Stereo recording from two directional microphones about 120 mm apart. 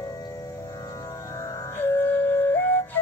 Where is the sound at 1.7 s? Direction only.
20° left (ahead or behind).